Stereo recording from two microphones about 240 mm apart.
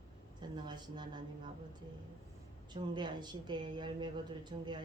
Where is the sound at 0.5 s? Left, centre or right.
Centre.